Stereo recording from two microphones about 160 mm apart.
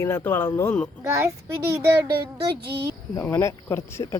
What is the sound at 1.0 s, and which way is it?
Speech, 15° right (ahead or behind).